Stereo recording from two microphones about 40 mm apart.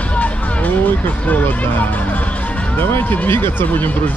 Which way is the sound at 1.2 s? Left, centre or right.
Left.